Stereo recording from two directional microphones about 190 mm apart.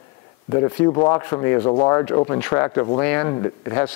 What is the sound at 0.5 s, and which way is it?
Speech, 20° left (ahead or behind).